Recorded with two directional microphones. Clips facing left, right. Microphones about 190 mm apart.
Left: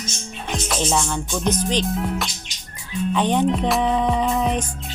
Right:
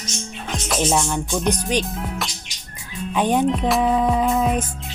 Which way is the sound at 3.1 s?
10° right (ahead or behind).